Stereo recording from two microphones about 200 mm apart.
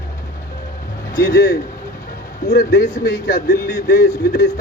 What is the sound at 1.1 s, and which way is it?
A man's voice, 50° left (ahead or behind).